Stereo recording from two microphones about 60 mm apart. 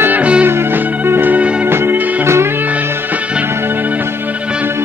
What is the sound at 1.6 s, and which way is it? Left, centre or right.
Music, right.